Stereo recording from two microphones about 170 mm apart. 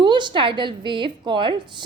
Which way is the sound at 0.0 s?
25° right (ahead or behind).